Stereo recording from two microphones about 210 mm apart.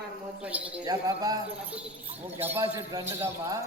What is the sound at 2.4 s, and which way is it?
A man's voice, 15° right (ahead or behind).